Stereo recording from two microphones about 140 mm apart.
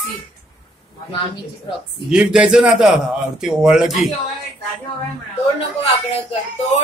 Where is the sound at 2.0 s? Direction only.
5° right (ahead or behind).